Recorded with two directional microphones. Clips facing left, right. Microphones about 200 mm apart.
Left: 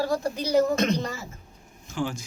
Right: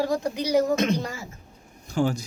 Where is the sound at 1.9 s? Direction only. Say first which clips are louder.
Right 5 dB; 40° right (ahead or behind).